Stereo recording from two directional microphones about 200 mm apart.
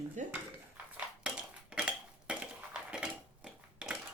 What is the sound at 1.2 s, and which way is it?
Dishes, 5° right (ahead or behind).